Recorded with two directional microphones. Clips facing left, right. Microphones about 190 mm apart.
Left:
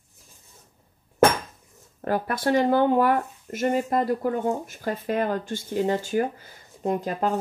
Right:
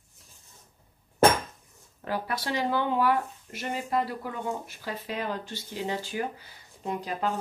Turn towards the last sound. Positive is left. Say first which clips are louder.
# left 6 dB
turn(degrees=45)  # may be behind; listen again after turning